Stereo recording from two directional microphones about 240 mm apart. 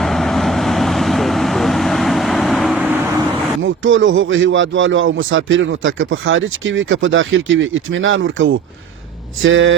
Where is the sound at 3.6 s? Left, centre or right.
Right.